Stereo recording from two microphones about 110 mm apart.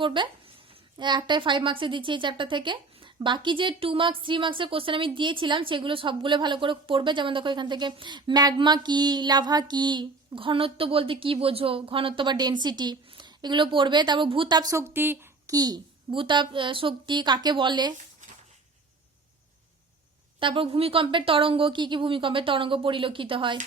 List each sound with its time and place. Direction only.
0.0 s a sound: 50° right (ahead or behind)
0.9 s a woman's voice: 45° right (ahead or behind); by 15.3 s 20° right (ahead or behind)
15.4 s a child's voice: 35° right (ahead or behind)
20.4 s a woman's voice: 55° right (ahead or behind)